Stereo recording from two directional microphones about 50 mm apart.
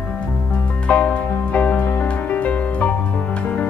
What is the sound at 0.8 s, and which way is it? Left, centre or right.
Music, left.